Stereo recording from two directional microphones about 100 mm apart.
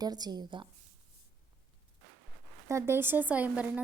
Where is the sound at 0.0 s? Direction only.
40° right (ahead or behind).